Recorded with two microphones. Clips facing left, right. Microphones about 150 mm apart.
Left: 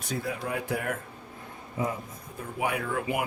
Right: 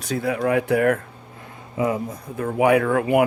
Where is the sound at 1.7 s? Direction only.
90° right; by 3.2 s 70° right (ahead or behind).